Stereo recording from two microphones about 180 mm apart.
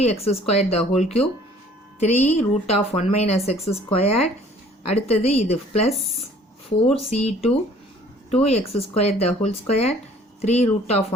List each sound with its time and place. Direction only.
0.0 s a woman's voice: 35° left (ahead or behind)
6.9 s a woman's voice: 35° left (ahead or behind)